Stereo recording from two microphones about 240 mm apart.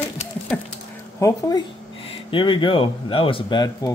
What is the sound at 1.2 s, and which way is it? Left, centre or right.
Speech, centre.